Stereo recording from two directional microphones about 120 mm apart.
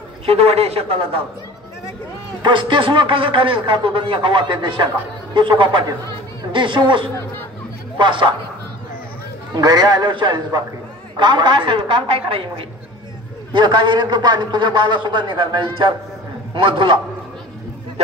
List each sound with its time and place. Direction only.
0.3 s a man's voice: 55° right (ahead or behind)
2.4 s a man's voice: 40° right (ahead or behind)
9.6 s a man's voice: 35° right (ahead or behind)